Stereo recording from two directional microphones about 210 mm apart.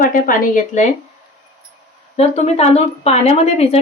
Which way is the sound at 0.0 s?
40° left (ahead or behind).